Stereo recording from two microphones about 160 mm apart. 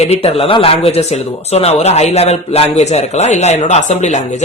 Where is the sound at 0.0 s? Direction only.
40° left (ahead or behind).